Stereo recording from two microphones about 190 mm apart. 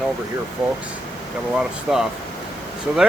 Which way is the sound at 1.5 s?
5° right (ahead or behind).